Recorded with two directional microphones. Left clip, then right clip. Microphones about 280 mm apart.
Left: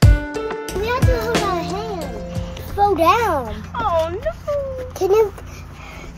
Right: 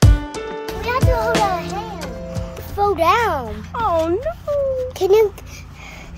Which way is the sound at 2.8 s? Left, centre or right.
Right.